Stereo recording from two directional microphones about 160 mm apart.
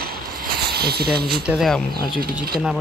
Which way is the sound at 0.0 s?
70° right (ahead or behind).